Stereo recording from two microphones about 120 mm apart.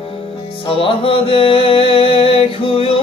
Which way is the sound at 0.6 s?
50° left (ahead or behind).